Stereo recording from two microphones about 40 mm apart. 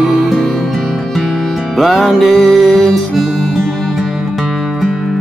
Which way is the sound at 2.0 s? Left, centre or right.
Centre.